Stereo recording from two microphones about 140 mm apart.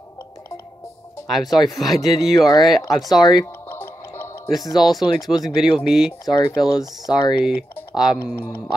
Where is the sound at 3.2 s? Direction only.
20° left (ahead or behind).